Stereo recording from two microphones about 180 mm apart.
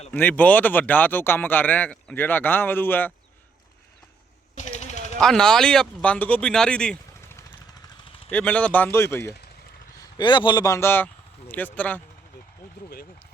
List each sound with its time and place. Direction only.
0.1 s speech: 10° left (ahead or behind)
4.5 s a sound: 40° left (ahead or behind)
5.2 s speech: 5° left (ahead or behind)
8.3 s speech: 10° left (ahead or behind)
10.0 s a man's voice: 25° left (ahead or behind); by 12.0 s 10° left (ahead or behind)